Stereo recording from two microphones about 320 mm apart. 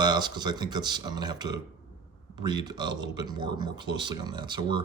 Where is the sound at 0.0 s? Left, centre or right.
Centre.